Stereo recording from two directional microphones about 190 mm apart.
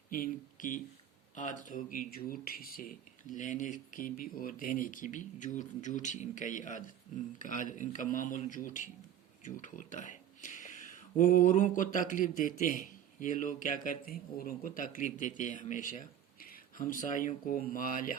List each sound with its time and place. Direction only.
0.1 s speech: 45° left (ahead or behind)